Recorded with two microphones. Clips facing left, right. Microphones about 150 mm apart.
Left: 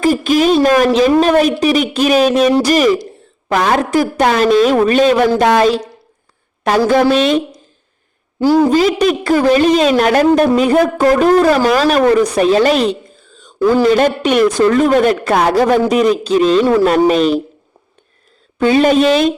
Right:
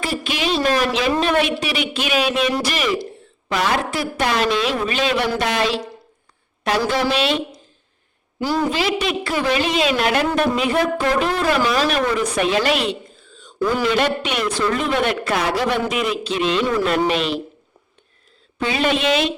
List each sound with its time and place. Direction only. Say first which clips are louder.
0.0 s a woman's voice: left 12 dB; 40° left (ahead or behind)
3.5 s a woman's voice: left 8 dB; 50° left (ahead or behind)
8.7 s speech: left 9 dB; 45° left (ahead or behind)
18.6 s a woman's voice: left 9 dB; 40° left (ahead or behind)